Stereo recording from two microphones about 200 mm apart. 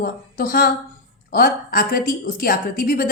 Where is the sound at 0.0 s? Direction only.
45° left (ahead or behind).